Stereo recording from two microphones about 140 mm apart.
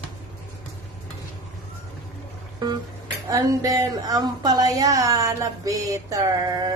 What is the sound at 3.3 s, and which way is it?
Speech, 25° right (ahead or behind).